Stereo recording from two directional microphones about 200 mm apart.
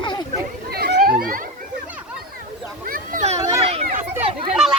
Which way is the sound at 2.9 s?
40° right (ahead or behind).